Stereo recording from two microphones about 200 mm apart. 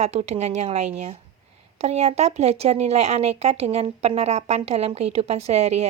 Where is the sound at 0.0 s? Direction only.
35° right (ahead or behind).